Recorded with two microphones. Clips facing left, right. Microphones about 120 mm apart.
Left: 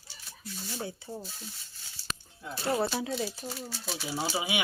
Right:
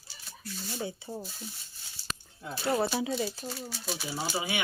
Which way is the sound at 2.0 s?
15° right (ahead or behind).